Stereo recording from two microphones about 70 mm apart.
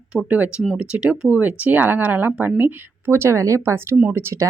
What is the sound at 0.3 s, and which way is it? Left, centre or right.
Speech, right.